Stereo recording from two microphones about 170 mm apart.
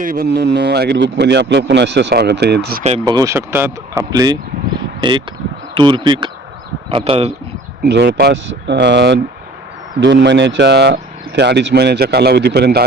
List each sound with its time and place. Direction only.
0.0 s speech: 60° right (ahead or behind)
2.8 s speech: 35° right (ahead or behind)
3.1 s speech: 20° right (ahead or behind); by 7.3 s 35° right (ahead or behind)
7.9 s speech: 85° right; by 12.8 s 70° right (ahead or behind)